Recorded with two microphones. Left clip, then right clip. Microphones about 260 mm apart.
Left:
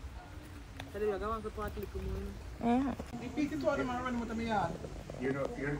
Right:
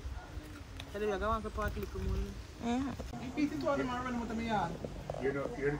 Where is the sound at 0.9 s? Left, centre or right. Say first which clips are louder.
Right 1 dB; right.